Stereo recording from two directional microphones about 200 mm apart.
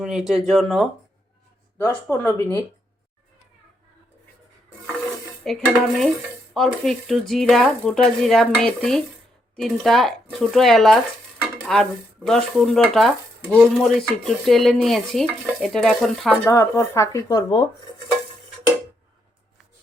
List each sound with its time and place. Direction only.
0.0 s dishes: centre (ahead or behind)
1.8 s speech: 10° left (ahead or behind)
5.4 s dishes: centre (ahead or behind)
16.5 s speech: 15° left (ahead or behind)